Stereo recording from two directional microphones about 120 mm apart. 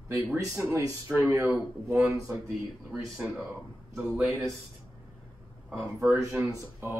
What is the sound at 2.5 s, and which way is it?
A man's voice, 5° right (ahead or behind).